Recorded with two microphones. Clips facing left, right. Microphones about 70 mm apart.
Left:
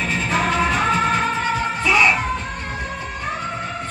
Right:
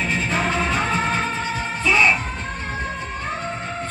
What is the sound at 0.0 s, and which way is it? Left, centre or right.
Music, right.